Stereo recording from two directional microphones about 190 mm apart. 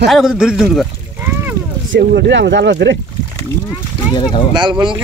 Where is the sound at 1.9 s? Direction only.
65° right (ahead or behind).